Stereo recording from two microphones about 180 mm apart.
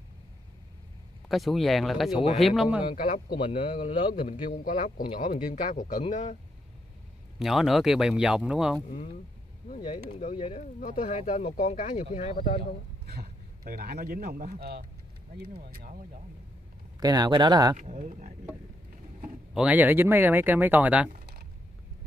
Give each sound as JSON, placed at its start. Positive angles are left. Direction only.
{"t": 1.3, "sound": "speech", "side_deg": 0}
{"t": 2.9, "sound": "a man's voice", "side_deg": 50}
{"t": 3.3, "sound": "a man's voice", "side_deg": 30}
{"t": 3.7, "sound": "a man's voice", "side_deg": 45}
{"t": 7.3, "sound": "speech", "side_deg": 0}
{"t": 10.1, "sound": "speech", "side_deg": 45}
{"t": 13.0, "sound": "speech", "side_deg": -60}
{"t": 17.0, "sound": "speech", "side_deg": -20}
{"t": 17.7, "sound": "speech", "side_deg": -40}
{"t": 19.5, "sound": "speech", "side_deg": -5}